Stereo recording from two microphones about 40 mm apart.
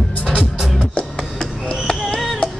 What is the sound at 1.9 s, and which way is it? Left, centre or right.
Music, left.